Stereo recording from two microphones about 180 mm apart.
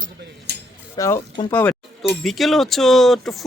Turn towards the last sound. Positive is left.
turn(degrees=0)  # may be behind; listen again after turning